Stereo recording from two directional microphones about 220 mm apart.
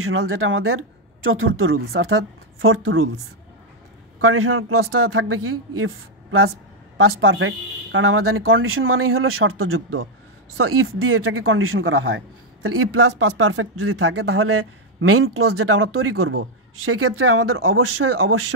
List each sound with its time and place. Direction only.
0.3 s speech: 70° right (ahead or behind)
4.2 s speech: 80° right
7.0 s speech: 65° right (ahead or behind)
12.6 s speech: 80° right
16.8 s speech: 80° right